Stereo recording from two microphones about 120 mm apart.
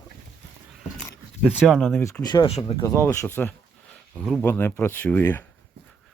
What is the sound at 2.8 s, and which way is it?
Speech, 25° left (ahead or behind).